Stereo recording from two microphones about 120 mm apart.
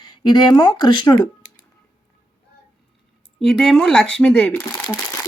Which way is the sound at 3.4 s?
5° left (ahead or behind).